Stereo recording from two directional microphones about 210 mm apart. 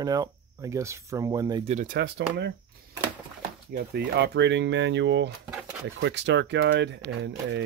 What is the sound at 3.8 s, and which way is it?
Speech, 50° right (ahead or behind).